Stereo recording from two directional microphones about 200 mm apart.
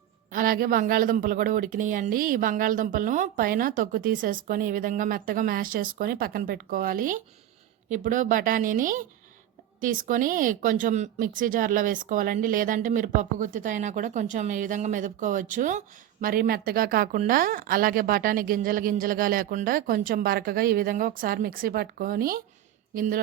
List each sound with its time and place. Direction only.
0.3 s speech: 45° right (ahead or behind)